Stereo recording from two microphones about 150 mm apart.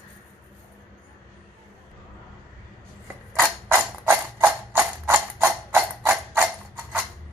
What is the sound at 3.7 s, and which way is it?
Mechanisms, 15° right (ahead or behind).